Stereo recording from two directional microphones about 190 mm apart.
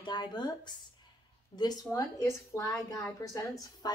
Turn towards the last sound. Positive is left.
turn(degrees=20)  # may be behind; listen again after turning